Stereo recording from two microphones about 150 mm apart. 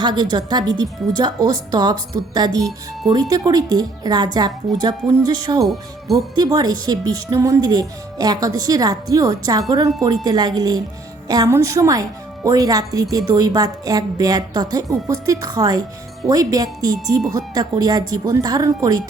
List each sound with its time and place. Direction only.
0.0 s a woman's voice: 30° right (ahead or behind)
2.6 s speech: 5° left (ahead or behind)
3.1 s a woman's voice: 25° right (ahead or behind)
5.6 s speech: centre (ahead or behind)
6.3 s a woman's voice: 25° right (ahead or behind)